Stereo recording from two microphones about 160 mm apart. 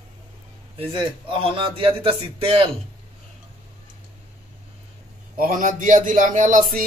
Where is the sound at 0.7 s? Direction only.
35° right (ahead or behind).